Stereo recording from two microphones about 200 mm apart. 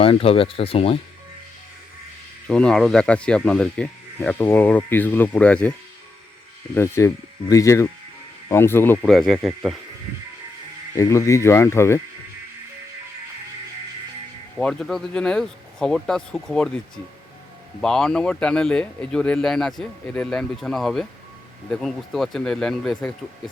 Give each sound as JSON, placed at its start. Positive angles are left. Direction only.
{"t": 0.0, "sound": "speech", "side_deg": 30}
{"t": 2.5, "sound": "speech", "side_deg": 5}
{"t": 6.7, "sound": "speech", "side_deg": 15}
{"t": 10.9, "sound": "speech", "side_deg": 15}
{"t": 14.6, "sound": "speech", "side_deg": 5}